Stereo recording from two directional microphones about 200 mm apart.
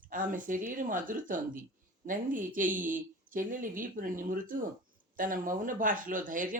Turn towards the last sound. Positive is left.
turn(degrees=-40)  # may be behind; listen again after turning